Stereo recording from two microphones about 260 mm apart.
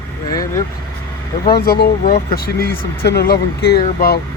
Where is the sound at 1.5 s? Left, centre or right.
Left.